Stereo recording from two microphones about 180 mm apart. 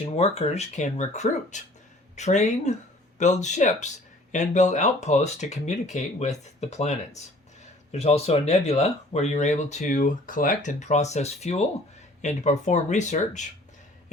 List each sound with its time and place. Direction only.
0.0 s speech: 40° left (ahead or behind)